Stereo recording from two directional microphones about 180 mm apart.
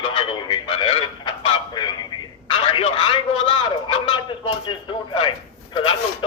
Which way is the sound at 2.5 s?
30° left (ahead or behind).